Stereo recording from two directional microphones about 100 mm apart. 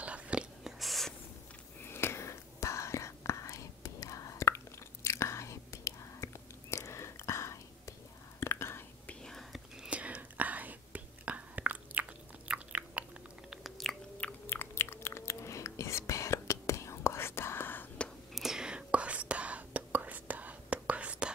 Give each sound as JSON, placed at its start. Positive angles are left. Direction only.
{"t": 0.0, "sound": "whispering", "side_deg": -10}
{"t": 1.9, "sound": "whispering", "side_deg": 25}
{"t": 9.2, "sound": "whispering", "side_deg": 5}
{"t": 9.8, "sound": "whispering", "side_deg": -15}
{"t": 13.5, "sound": "chewing", "side_deg": 0}
{"t": 14.2, "sound": "chewing", "side_deg": 20}
{"t": 18.3, "sound": "whispering", "side_deg": -5}